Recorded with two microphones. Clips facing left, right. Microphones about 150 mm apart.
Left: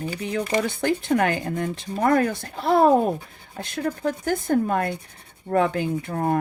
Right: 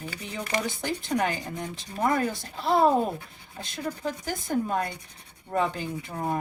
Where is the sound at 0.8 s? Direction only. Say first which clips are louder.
Left 8 dB; 55° left (ahead or behind).